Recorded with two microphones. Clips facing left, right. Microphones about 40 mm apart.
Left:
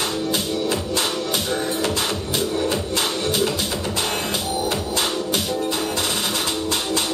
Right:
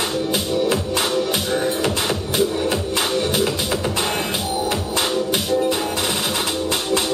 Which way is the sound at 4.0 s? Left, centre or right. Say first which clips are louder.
Right 2 dB; centre.